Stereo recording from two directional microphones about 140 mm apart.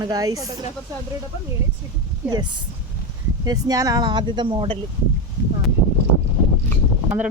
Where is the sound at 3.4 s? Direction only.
25° right (ahead or behind).